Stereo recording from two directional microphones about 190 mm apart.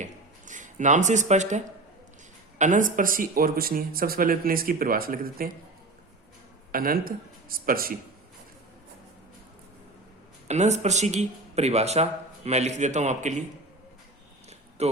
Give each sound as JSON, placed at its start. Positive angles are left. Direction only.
{"t": 0.0, "sound": "a sound", "side_deg": -40}
{"t": 2.6, "sound": "speech", "side_deg": -40}
{"t": 6.7, "sound": "speech", "side_deg": -50}
{"t": 10.5, "sound": "speech", "side_deg": -35}
{"t": 14.8, "sound": "music", "side_deg": -35}